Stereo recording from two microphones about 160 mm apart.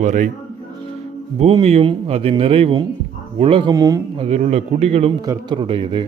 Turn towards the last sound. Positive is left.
turn(degrees=-30)  # may be behind; listen again after turning